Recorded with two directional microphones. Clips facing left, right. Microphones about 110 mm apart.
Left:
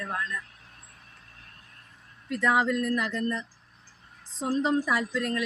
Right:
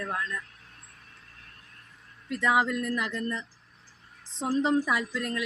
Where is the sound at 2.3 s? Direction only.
10° right (ahead or behind).